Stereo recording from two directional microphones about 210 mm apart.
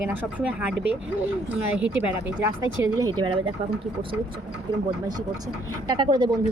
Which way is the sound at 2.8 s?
15° right (ahead or behind).